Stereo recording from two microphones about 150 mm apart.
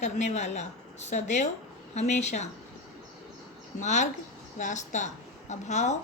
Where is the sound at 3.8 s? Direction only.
50° left (ahead or behind).